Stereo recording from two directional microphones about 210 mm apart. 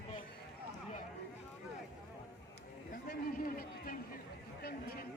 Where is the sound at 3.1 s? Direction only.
45° left (ahead or behind).